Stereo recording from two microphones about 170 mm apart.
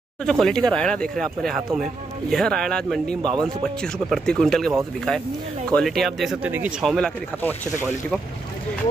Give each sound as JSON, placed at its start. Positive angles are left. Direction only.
{"t": 0.2, "sound": "speech", "side_deg": 5}
{"t": 3.2, "sound": "a man's voice", "side_deg": -25}
{"t": 3.4, "sound": "speech", "side_deg": 5}
{"t": 5.8, "sound": "speech", "side_deg": 0}
{"t": 7.4, "sound": "speech", "side_deg": 10}